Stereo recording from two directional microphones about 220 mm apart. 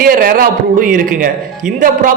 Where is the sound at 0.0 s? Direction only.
40° right (ahead or behind).